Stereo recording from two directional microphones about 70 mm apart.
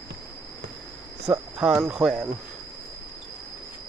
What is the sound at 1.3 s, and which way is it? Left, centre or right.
Cricket, right.